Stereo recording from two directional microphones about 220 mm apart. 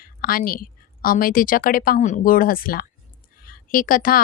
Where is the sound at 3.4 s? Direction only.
40° left (ahead or behind).